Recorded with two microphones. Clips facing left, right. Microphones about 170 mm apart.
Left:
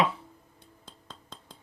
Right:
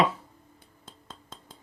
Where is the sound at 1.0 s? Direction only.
5° right (ahead or behind).